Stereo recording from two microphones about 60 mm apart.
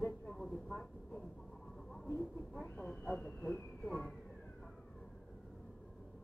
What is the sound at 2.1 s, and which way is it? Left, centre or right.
Vehicle, left.